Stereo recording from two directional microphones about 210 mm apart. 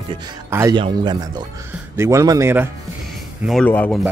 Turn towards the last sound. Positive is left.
turn(degrees=10)  # may be behind; listen again after turning